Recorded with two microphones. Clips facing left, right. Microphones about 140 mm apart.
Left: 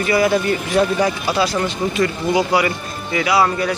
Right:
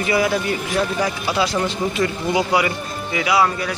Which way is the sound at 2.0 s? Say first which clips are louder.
Left 3 dB; 15° right (ahead or behind).